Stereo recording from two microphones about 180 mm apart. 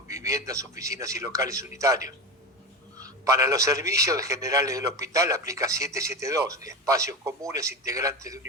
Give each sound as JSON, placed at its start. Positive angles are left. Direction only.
{"t": 0.1, "sound": "a man's voice", "side_deg": -15}